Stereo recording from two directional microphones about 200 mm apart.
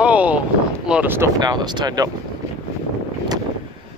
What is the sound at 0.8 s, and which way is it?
Speech, 5° right (ahead or behind).